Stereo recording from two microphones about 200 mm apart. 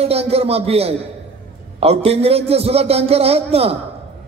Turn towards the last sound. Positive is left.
turn(degrees=-30)  # may be behind; listen again after turning